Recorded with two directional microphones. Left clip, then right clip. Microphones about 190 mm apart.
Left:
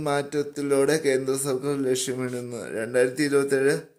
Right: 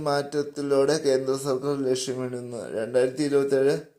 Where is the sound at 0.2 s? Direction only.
30° left (ahead or behind).